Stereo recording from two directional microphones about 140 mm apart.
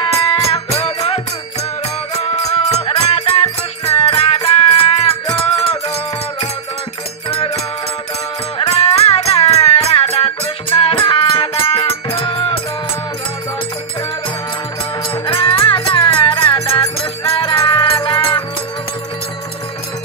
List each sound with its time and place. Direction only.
0.0 s music: 40° left (ahead or behind)
2.5 s music: 50° left (ahead or behind)
7.2 s music: 45° left (ahead or behind)
8.5 s music: 50° left (ahead or behind)
15.2 s music: 40° left (ahead or behind)
16.7 s music: 25° left (ahead or behind)
17.3 s music: 35° left (ahead or behind)